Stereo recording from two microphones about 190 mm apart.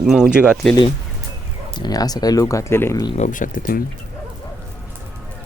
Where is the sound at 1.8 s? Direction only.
20° left (ahead or behind).